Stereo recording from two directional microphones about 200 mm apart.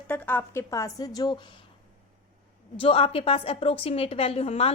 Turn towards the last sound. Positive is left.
turn(degrees=30)  # may be behind; listen again after turning